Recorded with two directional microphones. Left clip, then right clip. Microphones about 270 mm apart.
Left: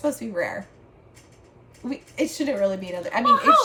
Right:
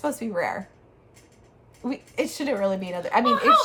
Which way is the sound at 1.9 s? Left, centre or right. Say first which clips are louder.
Left 1 dB; centre.